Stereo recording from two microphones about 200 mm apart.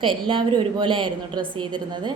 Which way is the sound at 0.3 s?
25° right (ahead or behind).